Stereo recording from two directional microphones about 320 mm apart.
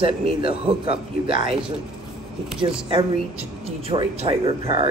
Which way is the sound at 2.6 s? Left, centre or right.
Centre.